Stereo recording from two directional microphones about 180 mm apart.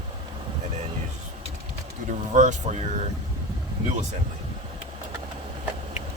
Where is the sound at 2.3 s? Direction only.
40° right (ahead or behind).